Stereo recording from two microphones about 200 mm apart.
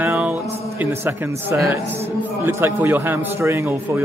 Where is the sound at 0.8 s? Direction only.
10° right (ahead or behind).